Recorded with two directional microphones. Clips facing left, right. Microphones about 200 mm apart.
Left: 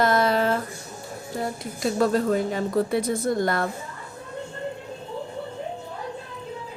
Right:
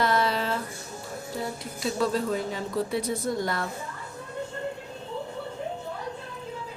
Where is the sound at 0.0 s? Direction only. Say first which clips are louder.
Left 5 dB; 45° left (ahead or behind).